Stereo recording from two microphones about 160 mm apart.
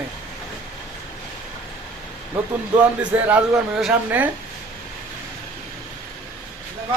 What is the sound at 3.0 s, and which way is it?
A woman's voice, 10° right (ahead or behind).